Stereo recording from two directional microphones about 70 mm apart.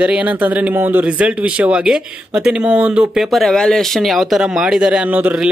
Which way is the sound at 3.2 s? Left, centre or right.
Centre.